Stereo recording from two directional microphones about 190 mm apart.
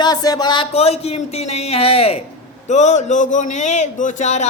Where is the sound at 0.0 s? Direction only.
20° left (ahead or behind).